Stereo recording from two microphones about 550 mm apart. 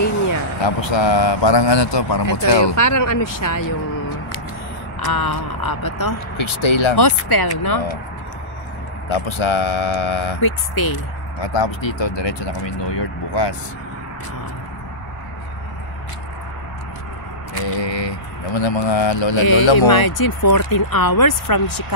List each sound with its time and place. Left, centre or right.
0.6 s a man's voice: left
2.7 s speech: left
5.0 s speech: left
6.3 s speech: left
7.0 s a man's voice: left
9.1 s speech: left
10.4 s speech: left
11.5 s a man's voice: left
17.6 s a man's voice: left
19.9 s speech: left